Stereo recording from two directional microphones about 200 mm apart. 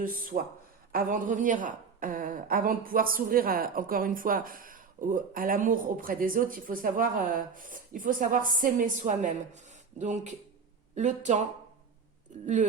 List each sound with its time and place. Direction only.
0.0 s a woman's voice: 45° right (ahead or behind)